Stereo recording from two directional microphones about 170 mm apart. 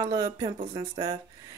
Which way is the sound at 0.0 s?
20° right (ahead or behind).